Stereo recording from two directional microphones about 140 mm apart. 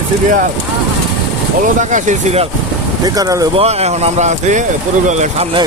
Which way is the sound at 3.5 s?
50° right (ahead or behind).